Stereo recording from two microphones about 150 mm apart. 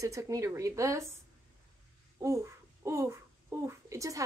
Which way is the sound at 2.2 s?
20° right (ahead or behind).